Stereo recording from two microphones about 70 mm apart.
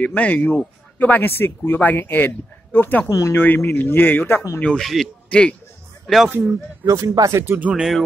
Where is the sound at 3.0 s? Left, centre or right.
Left.